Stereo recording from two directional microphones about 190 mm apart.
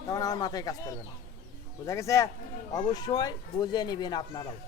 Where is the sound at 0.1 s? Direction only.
20° left (ahead or behind).